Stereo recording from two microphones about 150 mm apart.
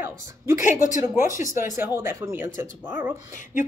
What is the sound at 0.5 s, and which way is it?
Speech, 60° left (ahead or behind).